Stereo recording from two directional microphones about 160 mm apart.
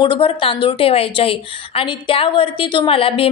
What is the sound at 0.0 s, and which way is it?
A woman's voice, 30° left (ahead or behind).